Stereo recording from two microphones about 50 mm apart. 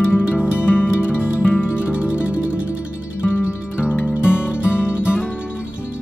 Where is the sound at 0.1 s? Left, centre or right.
Left.